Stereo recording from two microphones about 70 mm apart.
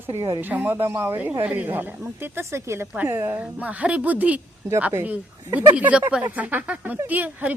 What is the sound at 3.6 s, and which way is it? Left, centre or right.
Speech, centre.